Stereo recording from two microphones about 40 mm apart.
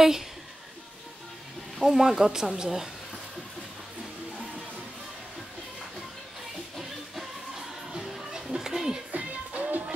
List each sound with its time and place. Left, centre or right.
1.8 s a woman's voice: centre
6.8 s music: centre
8.0 s a sound: centre
9.1 s music: right